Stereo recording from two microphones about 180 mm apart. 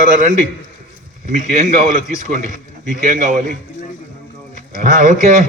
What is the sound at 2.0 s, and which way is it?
A man's voice, 45° right (ahead or behind).